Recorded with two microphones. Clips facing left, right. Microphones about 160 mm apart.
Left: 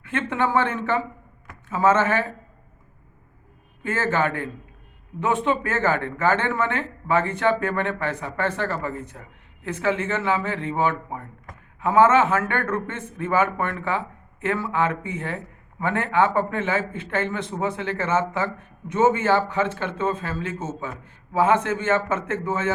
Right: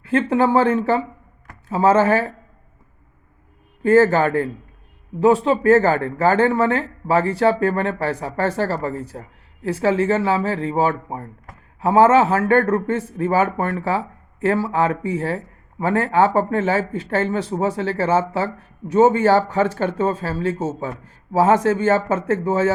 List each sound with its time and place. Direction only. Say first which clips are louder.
0.0 s speech: right 7 dB; 35° right (ahead or behind)
3.8 s speech: right 9 dB; 40° right (ahead or behind)